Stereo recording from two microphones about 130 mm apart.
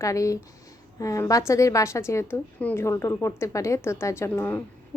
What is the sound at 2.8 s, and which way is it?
A woman's voice, 20° left (ahead or behind).